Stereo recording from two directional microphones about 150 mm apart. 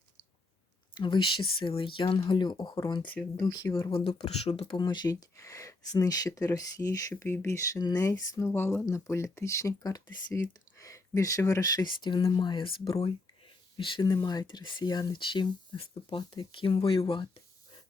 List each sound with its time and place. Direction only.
0.9 s speech: 30° left (ahead or behind)
3.0 s speech: 10° left (ahead or behind)
3.8 s speech: 40° left (ahead or behind)